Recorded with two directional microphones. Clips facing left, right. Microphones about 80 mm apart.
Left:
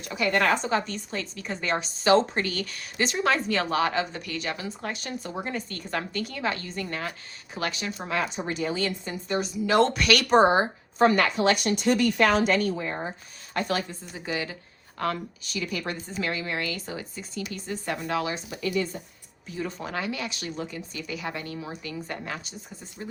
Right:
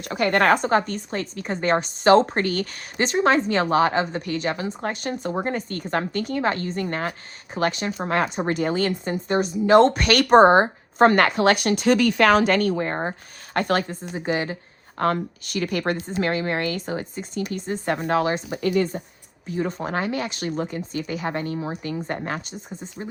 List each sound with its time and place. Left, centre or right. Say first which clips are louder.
0.0 s a woman's voice: right 5 dB; right
14.1 s a woman's voice: right 8 dB; right